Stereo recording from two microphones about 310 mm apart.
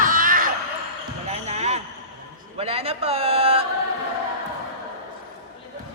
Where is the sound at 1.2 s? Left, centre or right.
Right.